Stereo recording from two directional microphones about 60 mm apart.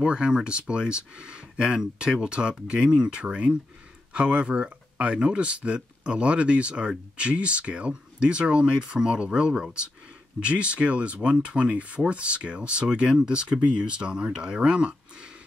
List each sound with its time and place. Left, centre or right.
0.0 s speech: centre